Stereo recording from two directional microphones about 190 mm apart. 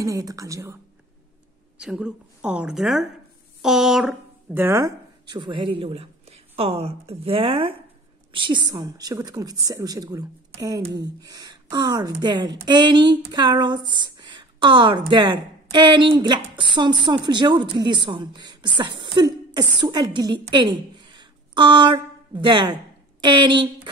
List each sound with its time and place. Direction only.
0.0 s a woman's voice: 20° right (ahead or behind)
1.8 s a woman's voice: 5° right (ahead or behind); by 23.9 s 25° right (ahead or behind)